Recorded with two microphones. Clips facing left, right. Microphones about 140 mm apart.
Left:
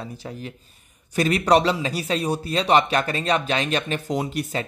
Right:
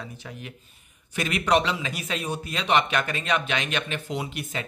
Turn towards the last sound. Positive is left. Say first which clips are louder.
# left 6 dB
turn(degrees=40)  # may be behind; listen again after turning